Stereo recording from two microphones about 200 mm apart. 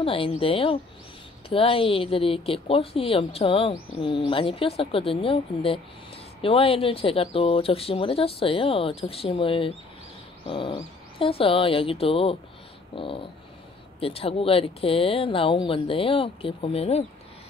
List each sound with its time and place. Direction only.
0.0 s a woman's voice: 25° left (ahead or behind)